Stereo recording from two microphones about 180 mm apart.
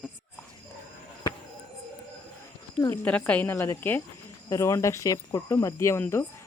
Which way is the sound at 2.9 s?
10° left (ahead or behind).